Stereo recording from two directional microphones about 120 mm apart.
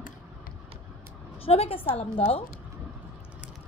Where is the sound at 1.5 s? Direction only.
55° left (ahead or behind).